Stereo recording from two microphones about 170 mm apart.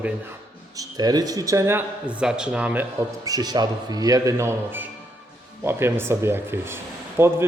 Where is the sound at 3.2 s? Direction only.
20° right (ahead or behind).